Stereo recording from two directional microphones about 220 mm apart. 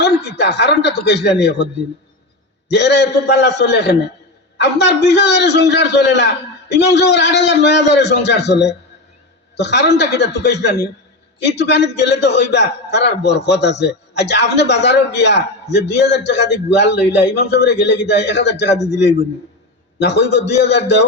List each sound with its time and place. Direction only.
0.0 s a man's voice: 50° left (ahead or behind)